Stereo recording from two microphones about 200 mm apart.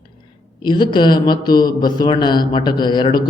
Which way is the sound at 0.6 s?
20° left (ahead or behind).